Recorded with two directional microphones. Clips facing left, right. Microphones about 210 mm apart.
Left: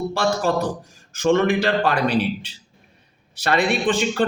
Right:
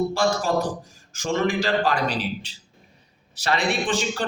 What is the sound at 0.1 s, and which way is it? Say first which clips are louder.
A man's voice: left 1 dB; 60° left (ahead or behind).